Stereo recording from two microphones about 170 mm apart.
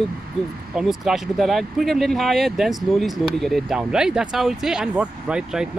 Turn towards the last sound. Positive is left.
turn(degrees=-5)  # may be behind; listen again after turning